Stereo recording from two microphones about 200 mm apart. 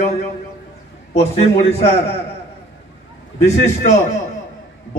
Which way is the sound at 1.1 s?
30° left (ahead or behind).